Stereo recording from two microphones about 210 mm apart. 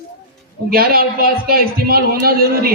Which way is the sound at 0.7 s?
45° right (ahead or behind).